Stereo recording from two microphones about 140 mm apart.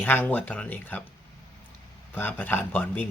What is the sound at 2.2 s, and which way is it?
Speech, 15° left (ahead or behind).